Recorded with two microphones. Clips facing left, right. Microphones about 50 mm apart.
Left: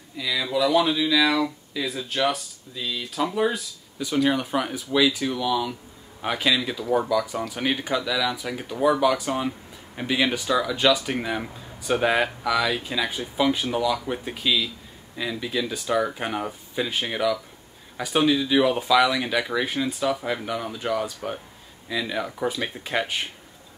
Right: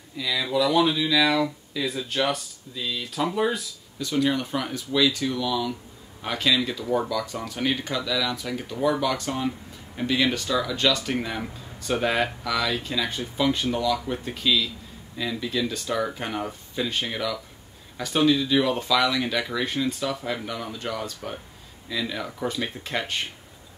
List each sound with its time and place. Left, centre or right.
0.2 s speech: centre
4.0 s speech: centre